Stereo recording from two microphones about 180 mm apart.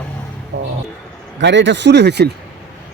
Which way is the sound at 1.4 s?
80° right.